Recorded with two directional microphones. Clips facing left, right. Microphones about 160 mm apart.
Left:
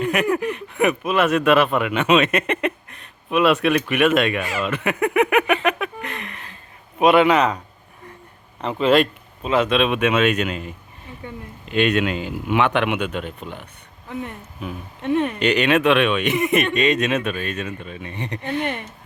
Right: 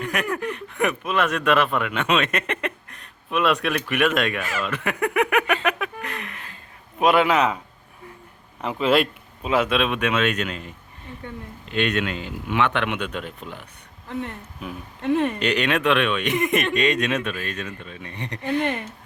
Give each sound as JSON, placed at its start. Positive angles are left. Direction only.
{"t": 0.0, "sound": "speech", "side_deg": 10}
{"t": 4.4, "sound": "speech", "side_deg": 20}
{"t": 4.6, "sound": "speech", "side_deg": 5}
{"t": 8.6, "sound": "speech", "side_deg": -5}
{"t": 11.7, "sound": "speech", "side_deg": 10}